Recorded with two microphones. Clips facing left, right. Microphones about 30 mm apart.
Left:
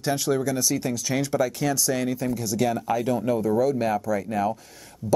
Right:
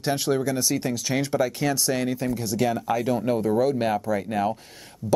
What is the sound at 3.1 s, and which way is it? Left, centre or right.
Speech, right.